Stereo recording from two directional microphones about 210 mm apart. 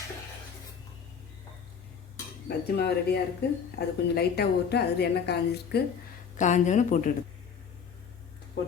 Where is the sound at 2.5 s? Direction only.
50° left (ahead or behind).